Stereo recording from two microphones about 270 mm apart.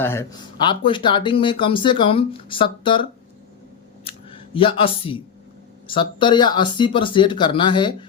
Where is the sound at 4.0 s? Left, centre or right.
Centre.